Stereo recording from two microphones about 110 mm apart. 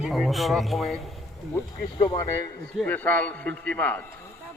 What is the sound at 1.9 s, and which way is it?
Speech, 40° left (ahead or behind).